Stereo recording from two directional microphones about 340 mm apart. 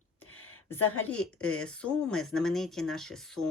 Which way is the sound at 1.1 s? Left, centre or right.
Centre.